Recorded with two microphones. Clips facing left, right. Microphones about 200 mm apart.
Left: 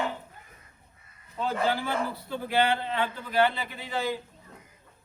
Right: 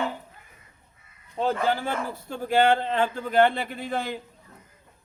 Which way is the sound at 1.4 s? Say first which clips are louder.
Right 3 dB; 45° right (ahead or behind).